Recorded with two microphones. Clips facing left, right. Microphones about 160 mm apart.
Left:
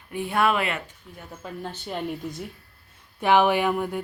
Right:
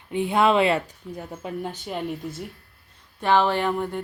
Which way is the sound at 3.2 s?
15° left (ahead or behind).